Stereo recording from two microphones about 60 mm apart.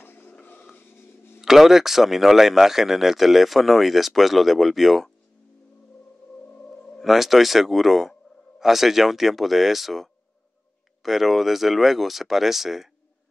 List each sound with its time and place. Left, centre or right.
0.0 s a sound: left
1.4 s speech: centre
7.0 s speech: centre